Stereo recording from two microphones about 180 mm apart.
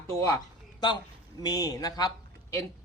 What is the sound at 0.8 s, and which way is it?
Speech, 25° left (ahead or behind).